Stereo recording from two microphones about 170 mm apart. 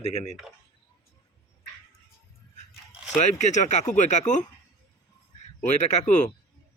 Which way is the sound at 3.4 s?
45° left (ahead or behind).